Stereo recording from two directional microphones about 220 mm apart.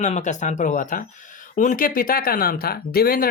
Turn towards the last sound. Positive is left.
turn(degrees=40)  # may be behind; listen again after turning